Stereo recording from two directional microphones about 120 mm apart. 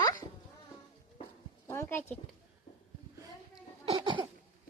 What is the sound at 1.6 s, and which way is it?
Speech, 20° left (ahead or behind).